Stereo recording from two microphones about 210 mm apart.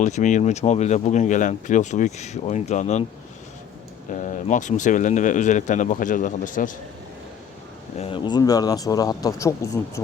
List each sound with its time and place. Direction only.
0.0 s speech: 35° left (ahead or behind)
4.1 s speech: 35° left (ahead or behind)
7.9 s speech: 25° left (ahead or behind)